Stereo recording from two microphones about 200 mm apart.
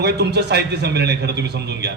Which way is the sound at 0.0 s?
55° right (ahead or behind).